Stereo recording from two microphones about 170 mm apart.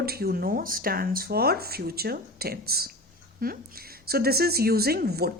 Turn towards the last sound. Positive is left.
turn(degrees=-65)  # may be behind; listen again after turning